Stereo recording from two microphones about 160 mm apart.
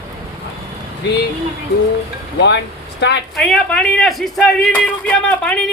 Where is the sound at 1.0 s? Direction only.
90° left.